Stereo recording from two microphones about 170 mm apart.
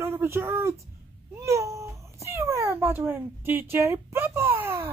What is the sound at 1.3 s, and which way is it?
Cat, 15° right (ahead or behind).